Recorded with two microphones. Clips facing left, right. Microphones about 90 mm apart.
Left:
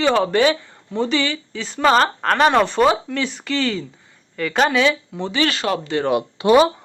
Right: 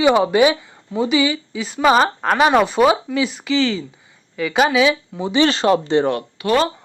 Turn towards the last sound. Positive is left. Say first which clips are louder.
# left 4 dB
turn(degrees=25)  # may be behind; listen again after turning